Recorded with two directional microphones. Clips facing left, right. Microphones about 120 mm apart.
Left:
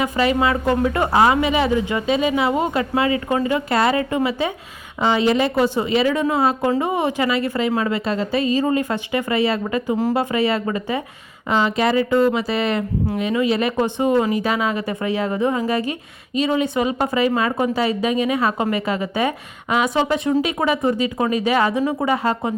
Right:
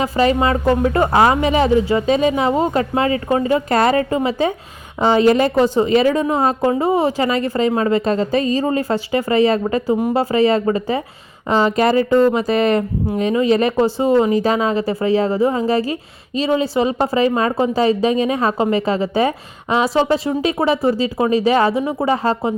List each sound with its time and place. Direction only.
0.0 s speech: 35° right (ahead or behind)
13.7 s a woman's voice: 30° right (ahead or behind)